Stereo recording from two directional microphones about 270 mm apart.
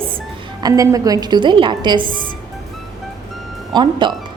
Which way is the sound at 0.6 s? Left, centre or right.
Centre.